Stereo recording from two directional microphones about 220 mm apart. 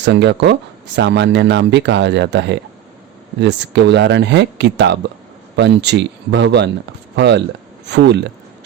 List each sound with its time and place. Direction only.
0.0 s speech: 50° right (ahead or behind)